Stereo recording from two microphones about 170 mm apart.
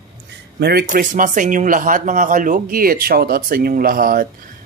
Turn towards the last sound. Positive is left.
turn(degrees=-55)  # may be behind; listen again after turning